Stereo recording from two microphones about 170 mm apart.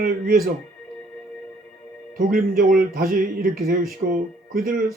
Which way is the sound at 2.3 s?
55° right (ahead or behind).